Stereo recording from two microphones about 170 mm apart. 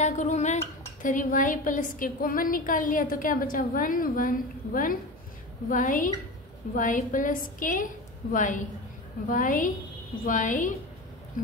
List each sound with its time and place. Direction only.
0.0 s a woman's voice: 45° left (ahead or behind)